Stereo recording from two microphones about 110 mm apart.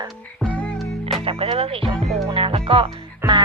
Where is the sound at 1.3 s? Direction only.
60° right (ahead or behind).